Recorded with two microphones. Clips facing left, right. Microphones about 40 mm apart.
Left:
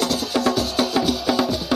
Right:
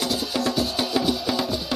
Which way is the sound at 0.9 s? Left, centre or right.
Centre.